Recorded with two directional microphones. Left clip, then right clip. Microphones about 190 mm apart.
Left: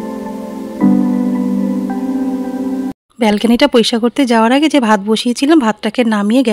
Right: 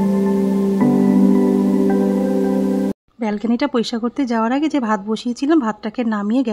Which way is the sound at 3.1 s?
25° left (ahead or behind).